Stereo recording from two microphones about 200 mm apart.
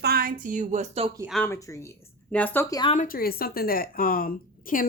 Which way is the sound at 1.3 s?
10° left (ahead or behind).